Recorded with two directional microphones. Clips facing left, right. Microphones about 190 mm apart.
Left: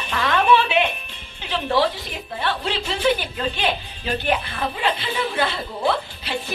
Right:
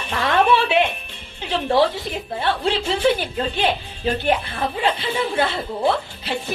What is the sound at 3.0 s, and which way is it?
Speech, 30° right (ahead or behind).